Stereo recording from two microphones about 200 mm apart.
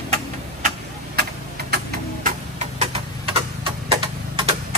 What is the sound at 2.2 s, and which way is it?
Tick-tock, 35° right (ahead or behind).